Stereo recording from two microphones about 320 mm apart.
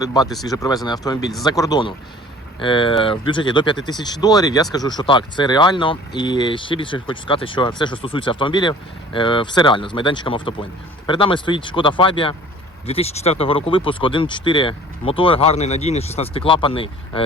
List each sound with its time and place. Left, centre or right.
0.0 s speech: centre